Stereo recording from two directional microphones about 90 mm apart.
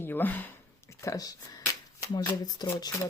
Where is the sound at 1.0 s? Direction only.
40° left (ahead or behind).